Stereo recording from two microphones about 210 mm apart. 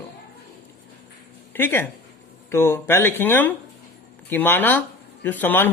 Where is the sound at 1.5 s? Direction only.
10° left (ahead or behind).